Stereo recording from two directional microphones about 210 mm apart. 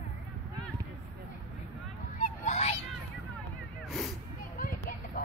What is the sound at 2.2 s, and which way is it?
Goose, 35° left (ahead or behind).